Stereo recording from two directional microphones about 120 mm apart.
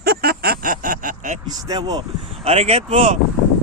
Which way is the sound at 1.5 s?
30° right (ahead or behind).